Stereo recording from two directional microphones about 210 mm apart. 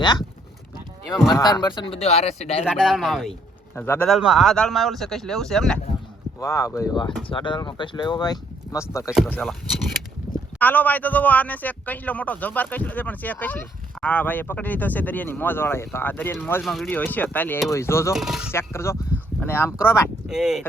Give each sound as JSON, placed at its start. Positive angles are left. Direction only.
{"t": 0.0, "sound": "speech", "side_deg": 20}
{"t": 1.1, "sound": "speech", "side_deg": 0}
{"t": 1.4, "sound": "speech", "side_deg": 20}
{"t": 2.6, "sound": "speech", "side_deg": 0}
{"t": 6.4, "sound": "a man's voice", "side_deg": 15}
{"t": 9.1, "sound": "a man's voice", "side_deg": 0}
{"t": 18.1, "sound": "speech", "side_deg": 0}
{"t": 18.5, "sound": "a man's voice", "side_deg": 10}
{"t": 20.2, "sound": "speech", "side_deg": -5}